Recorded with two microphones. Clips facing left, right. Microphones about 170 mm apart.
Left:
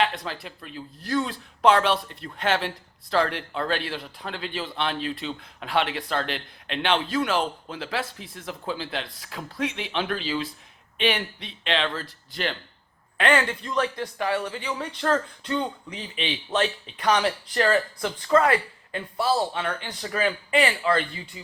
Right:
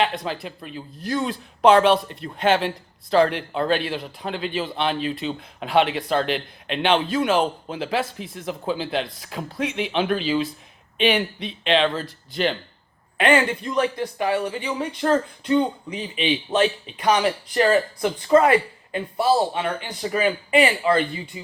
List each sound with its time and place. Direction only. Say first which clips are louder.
0.0 s a man's voice: right 3 dB; 20° right (ahead or behind)